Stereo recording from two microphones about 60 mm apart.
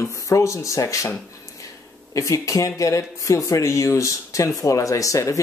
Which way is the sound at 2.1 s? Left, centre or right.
Left.